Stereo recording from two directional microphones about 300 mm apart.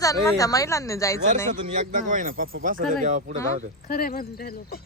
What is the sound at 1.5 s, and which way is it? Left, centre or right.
Speech, right.